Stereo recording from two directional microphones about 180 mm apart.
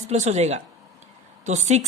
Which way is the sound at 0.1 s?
40° right (ahead or behind).